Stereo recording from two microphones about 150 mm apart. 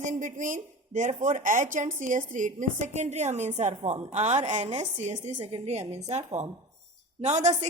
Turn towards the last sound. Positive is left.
turn(degrees=-50)  # may be behind; listen again after turning